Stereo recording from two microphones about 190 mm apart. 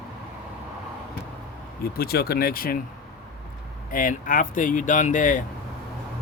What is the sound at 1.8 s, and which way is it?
Speech, 55° left (ahead or behind).